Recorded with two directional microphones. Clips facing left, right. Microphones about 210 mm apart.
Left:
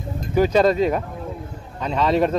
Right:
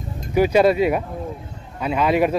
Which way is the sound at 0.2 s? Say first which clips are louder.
Right 1 dB; 10° right (ahead or behind).